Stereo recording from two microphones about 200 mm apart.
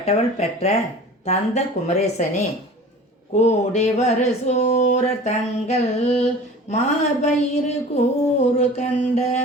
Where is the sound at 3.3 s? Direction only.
35° left (ahead or behind).